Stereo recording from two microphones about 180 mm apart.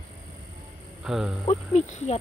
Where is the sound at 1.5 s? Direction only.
35° left (ahead or behind).